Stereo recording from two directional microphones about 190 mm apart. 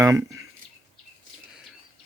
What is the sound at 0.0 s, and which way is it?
Speech, 15° right (ahead or behind).